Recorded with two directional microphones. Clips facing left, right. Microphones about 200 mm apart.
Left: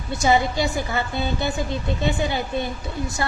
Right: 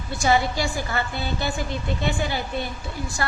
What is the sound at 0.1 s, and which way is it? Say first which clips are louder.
A woman's voice: left 2 dB; 20° left (ahead or behind).